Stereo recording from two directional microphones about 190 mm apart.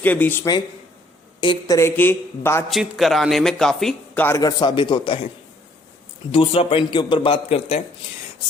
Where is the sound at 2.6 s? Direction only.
Centre (ahead or behind); by 5.2 s 25° left (ahead or behind).